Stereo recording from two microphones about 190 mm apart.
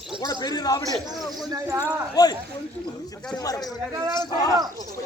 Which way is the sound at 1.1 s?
Centre (ahead or behind).